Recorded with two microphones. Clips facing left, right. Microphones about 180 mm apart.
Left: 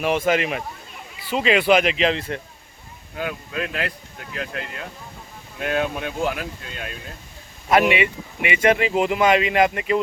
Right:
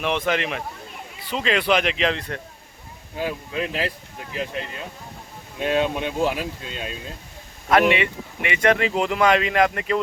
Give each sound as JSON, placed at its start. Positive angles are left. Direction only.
{"t": 0.3, "sound": "speech", "side_deg": 5}
{"t": 3.2, "sound": "speech", "side_deg": -30}
{"t": 7.7, "sound": "speech", "side_deg": 10}